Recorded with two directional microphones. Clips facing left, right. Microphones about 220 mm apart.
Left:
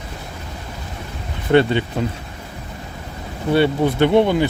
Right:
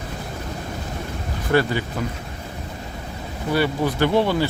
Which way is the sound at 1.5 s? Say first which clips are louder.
Left 5 dB; 25° left (ahead or behind).